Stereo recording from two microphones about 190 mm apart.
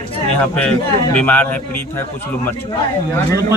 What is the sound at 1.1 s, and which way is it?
Speech, 10° left (ahead or behind).